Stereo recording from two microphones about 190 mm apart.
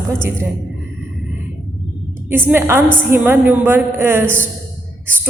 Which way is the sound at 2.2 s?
10° right (ahead or behind).